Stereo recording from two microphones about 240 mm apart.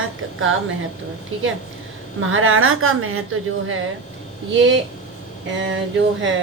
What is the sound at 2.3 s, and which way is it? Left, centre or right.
Speech, right.